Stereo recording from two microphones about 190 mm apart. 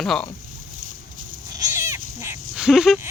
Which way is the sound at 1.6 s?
15° right (ahead or behind).